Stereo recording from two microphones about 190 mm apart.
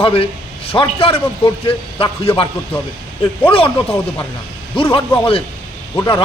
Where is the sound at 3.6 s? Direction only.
10° left (ahead or behind).